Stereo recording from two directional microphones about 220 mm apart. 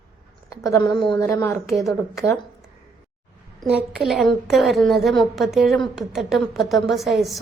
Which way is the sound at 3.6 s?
5° right (ahead or behind).